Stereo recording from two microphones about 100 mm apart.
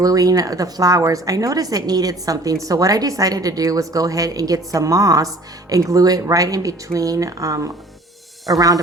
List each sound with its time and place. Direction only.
0.0 s a woman's voice: 35° right (ahead or behind)